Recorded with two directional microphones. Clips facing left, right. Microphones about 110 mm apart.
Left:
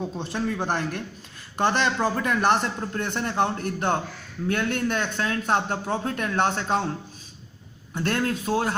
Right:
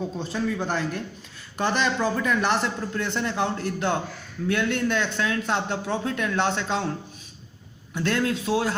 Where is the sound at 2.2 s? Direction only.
50° left (ahead or behind).